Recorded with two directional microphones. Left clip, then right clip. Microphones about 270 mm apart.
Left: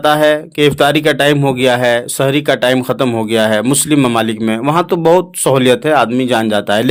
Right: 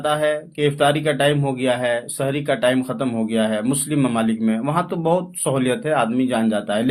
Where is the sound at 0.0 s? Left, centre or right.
Left.